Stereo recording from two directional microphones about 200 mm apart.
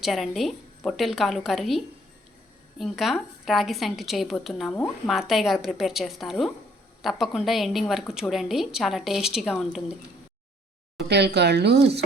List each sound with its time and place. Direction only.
0.0 s a woman's voice: centre (ahead or behind)
11.1 s speech: 55° right (ahead or behind)